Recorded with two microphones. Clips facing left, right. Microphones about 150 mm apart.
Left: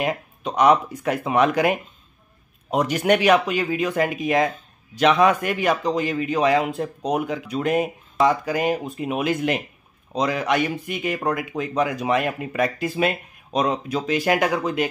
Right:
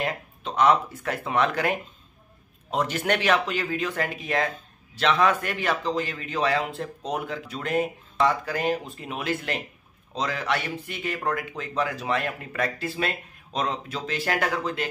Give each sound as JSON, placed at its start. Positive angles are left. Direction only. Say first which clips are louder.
{"t": 0.0, "sound": "a man's voice", "louder": "left 5 dB", "side_deg": 15}